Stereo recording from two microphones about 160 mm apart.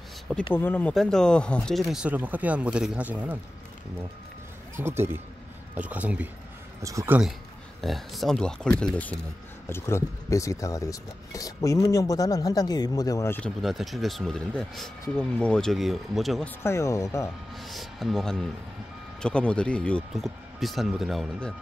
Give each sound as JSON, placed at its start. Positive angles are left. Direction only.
{"t": 0.6, "sound": "speech", "side_deg": 10}
{"t": 4.7, "sound": "speech", "side_deg": -15}
{"t": 6.8, "sound": "speech", "side_deg": -20}
{"t": 7.8, "sound": "speech", "side_deg": 0}
{"t": 13.4, "sound": "speech", "side_deg": 0}
{"t": 16.4, "sound": "speech", "side_deg": 15}
{"t": 17.6, "sound": "speech", "side_deg": 0}